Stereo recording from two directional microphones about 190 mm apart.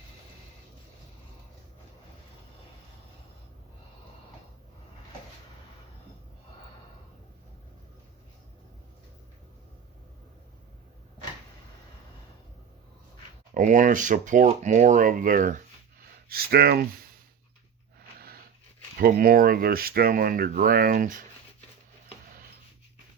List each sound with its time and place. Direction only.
13.5 s speech: 40° right (ahead or behind)
16.3 s speech: 55° right (ahead or behind)
18.9 s speech: 50° right (ahead or behind)